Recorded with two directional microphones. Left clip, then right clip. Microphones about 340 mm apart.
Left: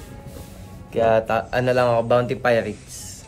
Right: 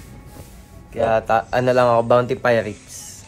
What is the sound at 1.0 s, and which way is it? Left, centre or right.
Speech, centre.